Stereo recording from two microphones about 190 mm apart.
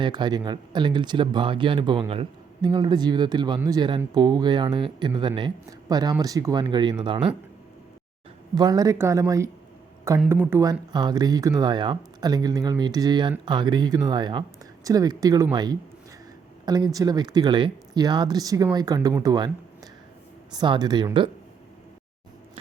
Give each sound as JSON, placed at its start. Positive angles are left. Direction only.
{"t": 0.0, "sound": "speech", "side_deg": -20}
{"t": 8.5, "sound": "speech", "side_deg": -20}
{"t": 10.2, "sound": "speech", "side_deg": -5}
{"t": 10.6, "sound": "speech", "side_deg": -20}